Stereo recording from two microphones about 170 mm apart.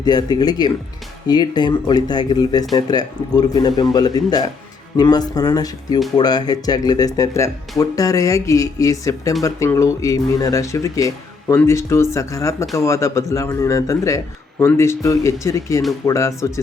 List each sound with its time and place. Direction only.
0.0 s speech: 25° left (ahead or behind)